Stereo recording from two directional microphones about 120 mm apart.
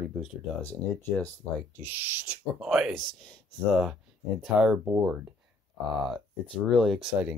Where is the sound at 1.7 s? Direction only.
15° right (ahead or behind).